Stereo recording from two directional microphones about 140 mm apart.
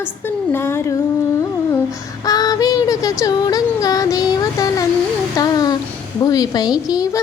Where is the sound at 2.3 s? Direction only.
25° left (ahead or behind).